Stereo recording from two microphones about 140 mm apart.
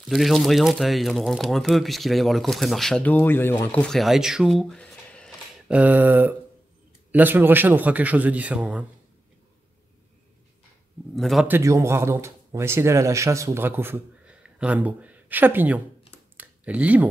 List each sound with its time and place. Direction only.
0.1 s speech: centre (ahead or behind)
5.7 s a man's voice: 10° right (ahead or behind)
11.1 s speech: centre (ahead or behind)
11.4 s speech: 20° right (ahead or behind)
16.3 s a sound: 10° right (ahead or behind)